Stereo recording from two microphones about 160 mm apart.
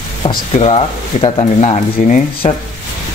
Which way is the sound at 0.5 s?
35° left (ahead or behind).